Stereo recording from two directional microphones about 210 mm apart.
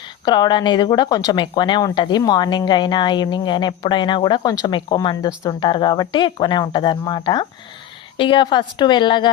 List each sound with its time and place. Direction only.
0.3 s speech: 20° left (ahead or behind)